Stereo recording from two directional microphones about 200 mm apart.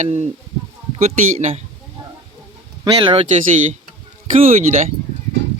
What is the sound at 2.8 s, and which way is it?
Speech, 25° right (ahead or behind).